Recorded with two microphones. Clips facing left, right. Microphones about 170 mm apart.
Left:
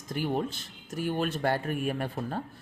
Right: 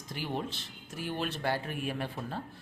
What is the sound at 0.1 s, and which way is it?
Speech, 45° left (ahead or behind).